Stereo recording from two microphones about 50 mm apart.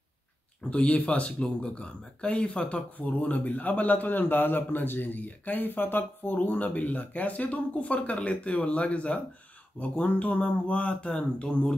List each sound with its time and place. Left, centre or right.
0.7 s a man's voice: left